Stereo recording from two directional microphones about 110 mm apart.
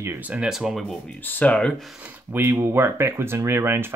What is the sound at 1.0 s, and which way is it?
Speech, 15° left (ahead or behind).